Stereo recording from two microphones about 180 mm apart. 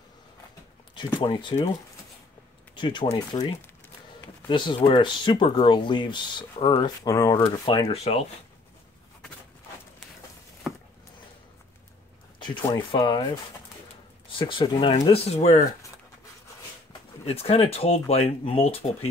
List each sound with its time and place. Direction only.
0.9 s speech: 30° left (ahead or behind)
2.7 s speech: 25° left (ahead or behind)
7.4 s speech: 30° left (ahead or behind)
12.9 s speech: 25° left (ahead or behind)
14.4 s speech: 25° left (ahead or behind)
17.3 s speech: 35° left (ahead or behind)